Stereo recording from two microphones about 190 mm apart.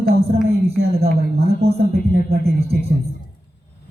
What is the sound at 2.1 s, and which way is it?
Mantra, 55° right (ahead or behind).